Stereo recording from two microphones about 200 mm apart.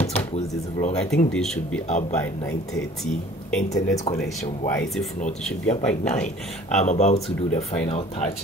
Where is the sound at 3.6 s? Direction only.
15° left (ahead or behind).